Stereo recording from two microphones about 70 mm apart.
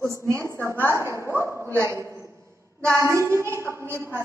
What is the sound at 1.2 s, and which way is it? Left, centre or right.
Speech, left.